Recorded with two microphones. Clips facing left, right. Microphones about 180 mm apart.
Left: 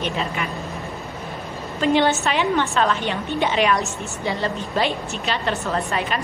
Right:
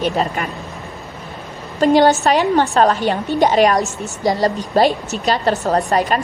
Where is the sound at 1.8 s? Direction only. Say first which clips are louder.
Right 6 dB; 40° right (ahead or behind).